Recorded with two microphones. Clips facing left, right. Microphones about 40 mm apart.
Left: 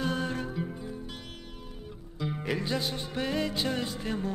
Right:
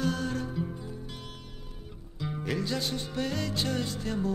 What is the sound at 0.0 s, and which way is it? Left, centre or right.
Music, left.